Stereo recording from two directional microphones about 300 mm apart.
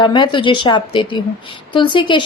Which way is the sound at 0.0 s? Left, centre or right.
Centre.